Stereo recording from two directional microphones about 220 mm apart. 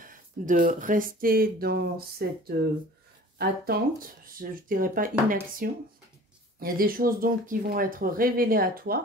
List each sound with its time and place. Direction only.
0.0 s speech: 40° right (ahead or behind)